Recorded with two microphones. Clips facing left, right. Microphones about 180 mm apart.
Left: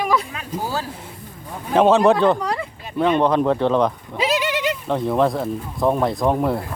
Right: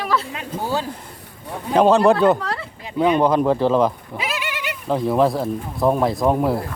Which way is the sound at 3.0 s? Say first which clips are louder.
Right 1 dB; centre (ahead or behind).